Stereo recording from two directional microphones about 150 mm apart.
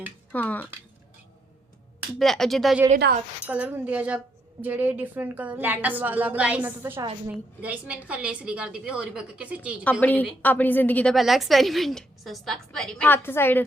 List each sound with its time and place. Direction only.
0.3 s a woman's voice: 10° left (ahead or behind)
2.1 s a woman's voice: centre (ahead or behind)
2.9 s speech: 70° right (ahead or behind)
3.4 s a woman's voice: 10° right (ahead or behind)
9.8 s a woman's voice: 10° left (ahead or behind)
11.1 s a woman's voice: centre (ahead or behind)